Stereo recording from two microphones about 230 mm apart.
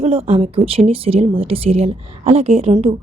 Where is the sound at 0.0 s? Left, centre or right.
Right.